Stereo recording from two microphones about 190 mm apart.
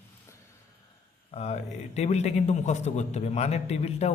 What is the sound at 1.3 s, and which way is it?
A man's voice, 35° left (ahead or behind).